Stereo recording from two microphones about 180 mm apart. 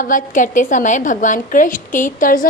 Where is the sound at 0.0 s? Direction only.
50° left (ahead or behind).